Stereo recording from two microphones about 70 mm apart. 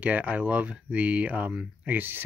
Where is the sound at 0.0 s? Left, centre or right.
Centre.